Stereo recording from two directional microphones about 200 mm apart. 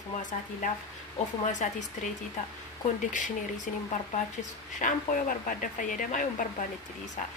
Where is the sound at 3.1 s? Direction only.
40° left (ahead or behind).